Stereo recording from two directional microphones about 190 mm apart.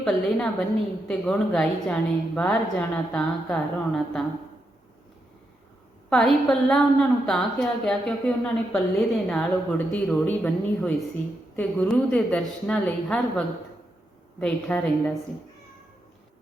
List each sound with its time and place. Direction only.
0.0 s a woman's voice: 5° left (ahead or behind)
6.1 s a woman's voice: centre (ahead or behind)